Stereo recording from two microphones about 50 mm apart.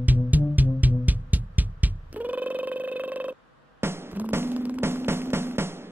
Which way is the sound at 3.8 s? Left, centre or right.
Right.